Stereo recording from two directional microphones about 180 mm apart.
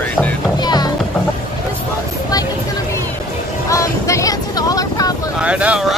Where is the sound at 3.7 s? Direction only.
15° left (ahead or behind).